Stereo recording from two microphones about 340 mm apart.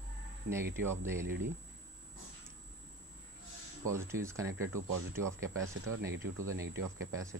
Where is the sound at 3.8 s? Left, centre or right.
Centre.